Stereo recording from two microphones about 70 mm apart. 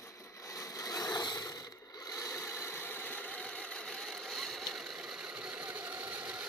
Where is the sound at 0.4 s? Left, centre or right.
Left.